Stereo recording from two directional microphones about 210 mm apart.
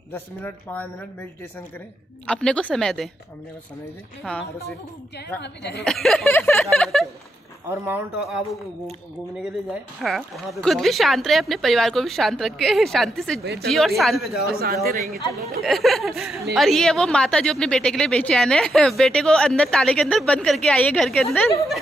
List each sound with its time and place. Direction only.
0.1 s speech: 10° left (ahead or behind)
2.2 s a woman's voice: 5° left (ahead or behind)
4.2 s a woman's voice: 5° left (ahead or behind)
4.6 s a woman's voice: 50° left (ahead or behind)
5.9 s a woman's voice: centre (ahead or behind)
7.6 s speech: 10° right (ahead or behind)
9.4 s a woman's voice: centre (ahead or behind)
13.4 s speech: 50° right (ahead or behind)
13.7 s a woman's voice: centre (ahead or behind)
14.4 s speech: 45° right (ahead or behind)
15.6 s a woman's voice: centre (ahead or behind)